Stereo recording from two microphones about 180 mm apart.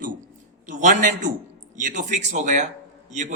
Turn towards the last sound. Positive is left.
turn(degrees=-40)  # may be behind; listen again after turning